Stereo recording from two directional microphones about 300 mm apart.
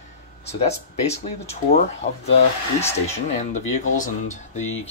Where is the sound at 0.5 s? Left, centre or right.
Left.